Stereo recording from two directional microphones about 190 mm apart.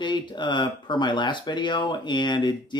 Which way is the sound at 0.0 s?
25° left (ahead or behind).